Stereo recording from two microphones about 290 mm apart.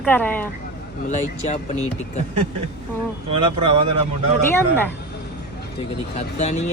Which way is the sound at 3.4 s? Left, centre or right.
Centre.